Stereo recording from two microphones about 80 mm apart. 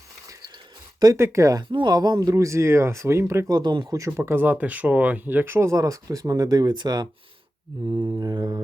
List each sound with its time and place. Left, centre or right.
1.1 s speech: right
1.6 s speech: right
2.3 s speech: right
3.5 s speech: right
4.2 s speech: right
7.9 s mantra: right
8.2 s speech: right